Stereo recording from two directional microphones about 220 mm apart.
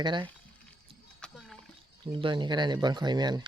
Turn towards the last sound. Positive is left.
turn(degrees=-20)  # may be behind; listen again after turning